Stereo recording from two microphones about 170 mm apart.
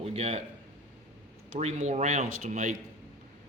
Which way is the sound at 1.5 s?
45° right (ahead or behind).